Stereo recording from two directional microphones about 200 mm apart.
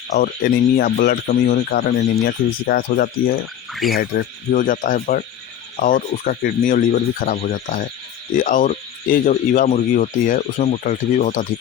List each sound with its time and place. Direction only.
0.1 s speech: 45° left (ahead or behind)
3.7 s speech: centre (ahead or behind)
3.9 s speech: 45° left (ahead or behind)